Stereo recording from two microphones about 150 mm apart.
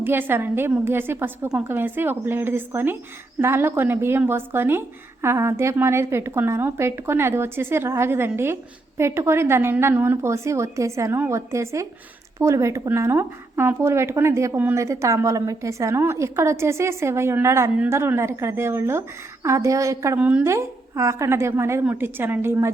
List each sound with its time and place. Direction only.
0.0 s speech: 15° right (ahead or behind)
20.1 s speech: 10° right (ahead or behind)